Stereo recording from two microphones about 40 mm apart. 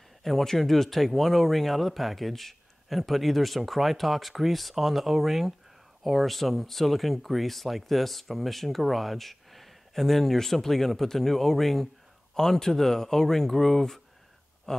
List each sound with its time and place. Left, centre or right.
0.2 s speech: centre